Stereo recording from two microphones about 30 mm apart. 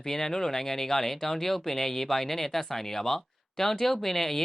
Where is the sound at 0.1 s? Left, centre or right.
Centre.